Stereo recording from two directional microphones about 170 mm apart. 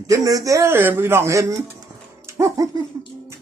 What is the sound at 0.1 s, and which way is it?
Speech, 20° right (ahead or behind).